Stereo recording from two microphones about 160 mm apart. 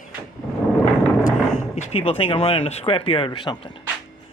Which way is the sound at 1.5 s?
50° left (ahead or behind).